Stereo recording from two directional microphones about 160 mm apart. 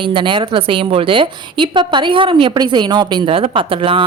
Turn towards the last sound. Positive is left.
turn(degrees=-35)  # may be behind; listen again after turning